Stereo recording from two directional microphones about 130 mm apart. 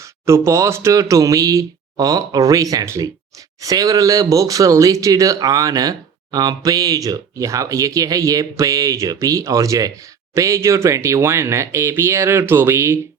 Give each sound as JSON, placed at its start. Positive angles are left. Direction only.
{"t": 0.0, "sound": "speech", "side_deg": -20}